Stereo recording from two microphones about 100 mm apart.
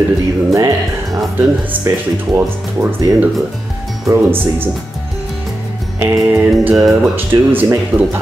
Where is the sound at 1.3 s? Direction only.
20° right (ahead or behind).